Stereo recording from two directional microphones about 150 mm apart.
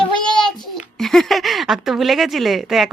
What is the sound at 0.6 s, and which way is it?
Speech, centre (ahead or behind).